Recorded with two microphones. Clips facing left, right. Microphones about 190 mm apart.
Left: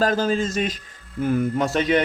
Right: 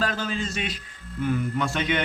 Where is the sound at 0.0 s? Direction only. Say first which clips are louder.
Left 7 dB; 40° left (ahead or behind).